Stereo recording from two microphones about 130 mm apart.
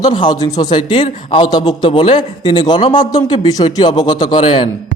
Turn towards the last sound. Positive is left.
turn(degrees=40)  # may be behind; listen again after turning